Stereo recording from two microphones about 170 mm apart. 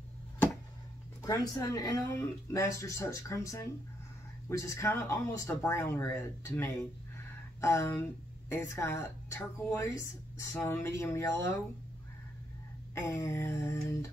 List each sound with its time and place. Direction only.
1.2 s speech: 20° left (ahead or behind)
12.9 s speech: 15° left (ahead or behind)